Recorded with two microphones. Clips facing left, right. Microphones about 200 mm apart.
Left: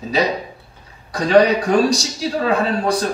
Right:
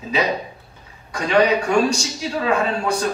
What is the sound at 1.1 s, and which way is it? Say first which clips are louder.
A man's voice: left 4 dB; 35° left (ahead or behind).